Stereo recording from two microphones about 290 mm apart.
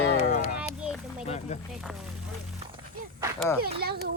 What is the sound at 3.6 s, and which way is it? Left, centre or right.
Speech, right.